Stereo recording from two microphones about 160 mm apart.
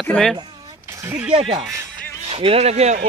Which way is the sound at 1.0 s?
15° right (ahead or behind).